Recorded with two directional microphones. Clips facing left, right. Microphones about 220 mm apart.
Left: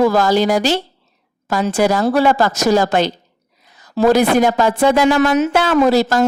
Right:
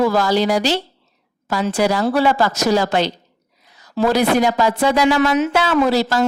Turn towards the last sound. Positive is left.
turn(degrees=45)  # may be behind; listen again after turning